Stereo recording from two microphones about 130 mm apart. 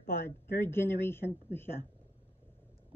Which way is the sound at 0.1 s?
20° left (ahead or behind).